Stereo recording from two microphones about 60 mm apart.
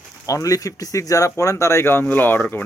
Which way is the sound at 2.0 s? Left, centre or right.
Left.